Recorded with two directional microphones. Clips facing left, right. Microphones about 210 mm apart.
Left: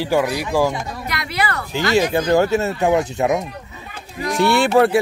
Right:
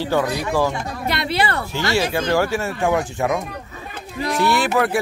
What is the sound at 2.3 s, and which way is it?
Speech, 20° left (ahead or behind).